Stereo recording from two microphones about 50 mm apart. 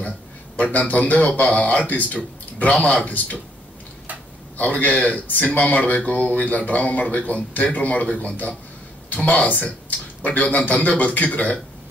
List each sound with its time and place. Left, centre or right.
0.6 s speech: left
4.6 s speech: left